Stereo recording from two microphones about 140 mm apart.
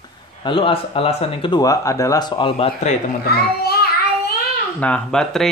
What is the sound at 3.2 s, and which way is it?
Speech, 90° left.